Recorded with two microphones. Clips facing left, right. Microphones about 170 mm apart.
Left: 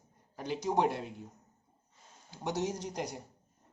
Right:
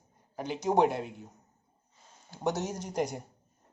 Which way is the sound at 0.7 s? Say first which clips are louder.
Right 4 dB; 60° right (ahead or behind).